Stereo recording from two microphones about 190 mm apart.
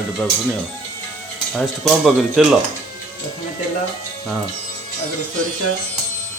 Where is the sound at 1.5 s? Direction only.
Centre (ahead or behind).